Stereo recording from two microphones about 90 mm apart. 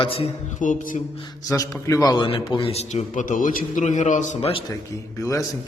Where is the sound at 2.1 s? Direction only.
80° left.